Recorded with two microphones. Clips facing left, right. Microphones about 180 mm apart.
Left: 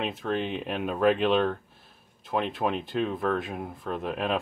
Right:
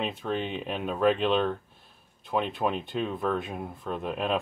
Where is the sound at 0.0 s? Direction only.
Centre (ahead or behind).